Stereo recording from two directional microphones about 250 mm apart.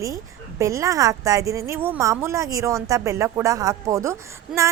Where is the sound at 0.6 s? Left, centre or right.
Centre.